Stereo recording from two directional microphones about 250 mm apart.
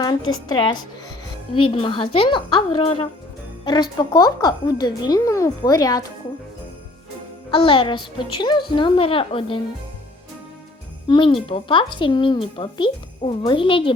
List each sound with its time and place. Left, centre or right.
0.4 s a woman's voice: centre
7.5 s speech: left
11.1 s speech: centre